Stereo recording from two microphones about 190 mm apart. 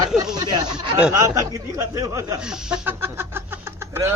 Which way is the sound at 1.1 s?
15° right (ahead or behind).